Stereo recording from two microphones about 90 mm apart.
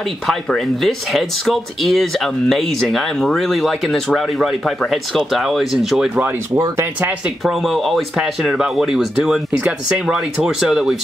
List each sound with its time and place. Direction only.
0.3 s speech: centre (ahead or behind)
7.0 s speech: 20° right (ahead or behind)
7.4 s speech: centre (ahead or behind)